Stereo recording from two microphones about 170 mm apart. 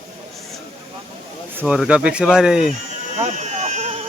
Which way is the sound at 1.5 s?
10° right (ahead or behind).